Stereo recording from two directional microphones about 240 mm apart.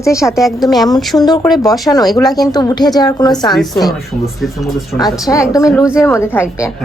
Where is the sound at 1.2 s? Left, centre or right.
Centre.